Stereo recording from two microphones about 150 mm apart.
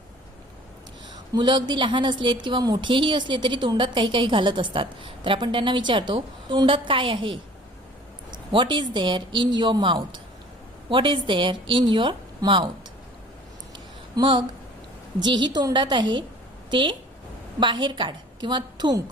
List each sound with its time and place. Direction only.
1.3 s a woman's voice: 30° right (ahead or behind)
8.5 s a woman's voice: 30° right (ahead or behind)
13.7 s a sound: 30° right (ahead or behind)
15.2 s a woman's voice: 30° right (ahead or behind)